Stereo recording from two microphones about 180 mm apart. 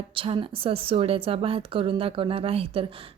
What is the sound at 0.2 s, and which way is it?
A woman's voice, 30° right (ahead or behind).